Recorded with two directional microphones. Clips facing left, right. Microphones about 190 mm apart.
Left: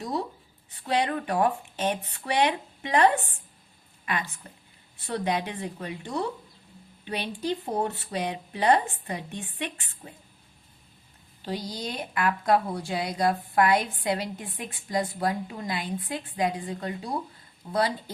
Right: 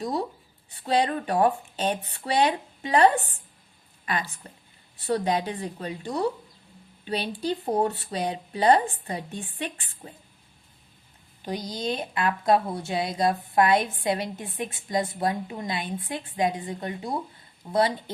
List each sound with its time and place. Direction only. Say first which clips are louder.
0.7 s a woman's voice: right 2 dB; 30° right (ahead or behind)
11.4 s a woman's voice: right 3 dB; 20° right (ahead or behind)